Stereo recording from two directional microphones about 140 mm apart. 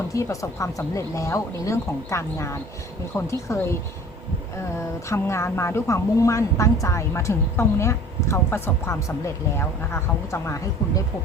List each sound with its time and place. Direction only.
0.1 s a woman's voice: 20° left (ahead or behind)
5.0 s a woman's voice: 20° left (ahead or behind)